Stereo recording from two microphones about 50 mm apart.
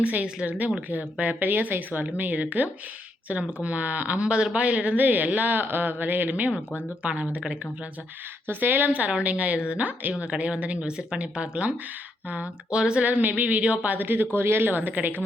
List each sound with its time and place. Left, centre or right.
0.4 s a woman's voice: right
8.4 s a woman's voice: right
8.9 s a woman's voice: right
12.7 s speech: centre
13.0 s speech: right
14.3 s speech: right